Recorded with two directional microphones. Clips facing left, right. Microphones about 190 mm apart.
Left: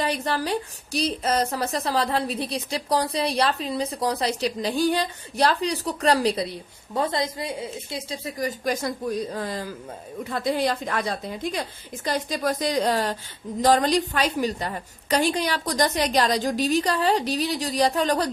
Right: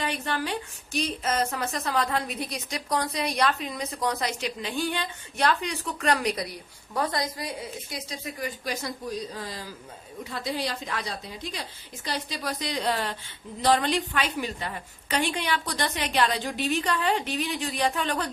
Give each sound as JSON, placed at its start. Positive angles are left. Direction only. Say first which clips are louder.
{"t": 0.0, "sound": "a woman's voice", "louder": "left 4 dB", "side_deg": 35}